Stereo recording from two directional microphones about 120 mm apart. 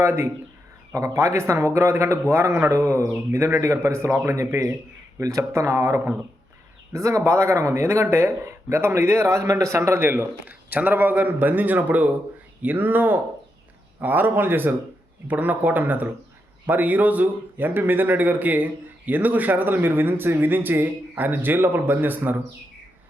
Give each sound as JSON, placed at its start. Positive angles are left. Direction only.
{"t": 0.0, "sound": "speech", "side_deg": -20}